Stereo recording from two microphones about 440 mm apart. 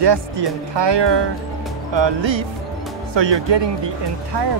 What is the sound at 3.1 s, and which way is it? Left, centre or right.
Speech, right.